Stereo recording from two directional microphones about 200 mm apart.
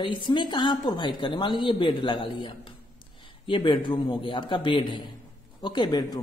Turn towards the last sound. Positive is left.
turn(degrees=20)  # may be behind; listen again after turning